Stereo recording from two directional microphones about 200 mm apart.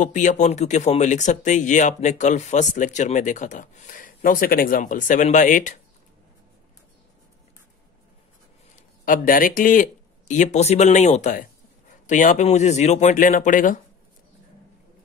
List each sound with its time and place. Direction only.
0.0 s speech: 40° left (ahead or behind)
8.7 s speech: 45° left (ahead or behind)